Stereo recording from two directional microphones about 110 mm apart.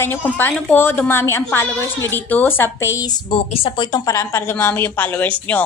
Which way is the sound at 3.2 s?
55° left (ahead or behind).